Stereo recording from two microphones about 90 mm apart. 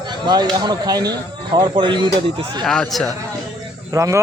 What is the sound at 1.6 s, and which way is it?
Speech, 60° right (ahead or behind).